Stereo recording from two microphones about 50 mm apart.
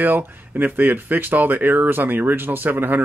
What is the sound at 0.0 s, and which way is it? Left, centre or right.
Speech, right.